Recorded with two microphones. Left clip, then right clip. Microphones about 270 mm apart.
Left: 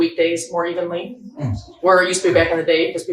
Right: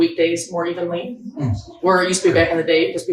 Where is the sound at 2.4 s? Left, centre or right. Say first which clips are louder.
Left 1 dB; centre.